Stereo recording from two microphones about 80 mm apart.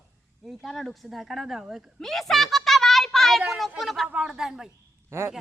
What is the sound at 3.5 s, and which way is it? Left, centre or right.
A woman's voice, centre.